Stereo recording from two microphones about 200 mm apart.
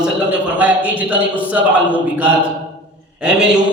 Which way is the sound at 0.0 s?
5° right (ahead or behind).